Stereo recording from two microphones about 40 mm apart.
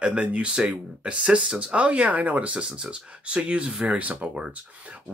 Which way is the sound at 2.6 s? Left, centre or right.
Right.